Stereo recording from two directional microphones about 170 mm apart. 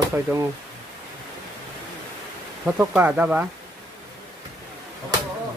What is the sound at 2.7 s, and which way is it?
Speech, 10° right (ahead or behind).